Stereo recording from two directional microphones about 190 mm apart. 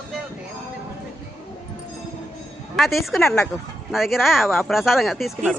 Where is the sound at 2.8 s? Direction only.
Centre (ahead or behind).